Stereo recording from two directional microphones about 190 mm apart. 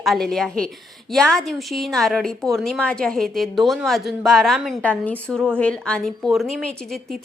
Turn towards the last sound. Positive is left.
turn(degrees=0)  # may be behind; listen again after turning